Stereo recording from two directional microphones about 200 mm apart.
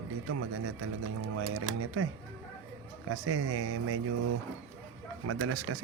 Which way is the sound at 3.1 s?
90° right.